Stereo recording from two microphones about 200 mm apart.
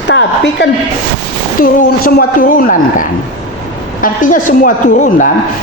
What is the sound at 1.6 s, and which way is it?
A woman's voice, 45° left (ahead or behind).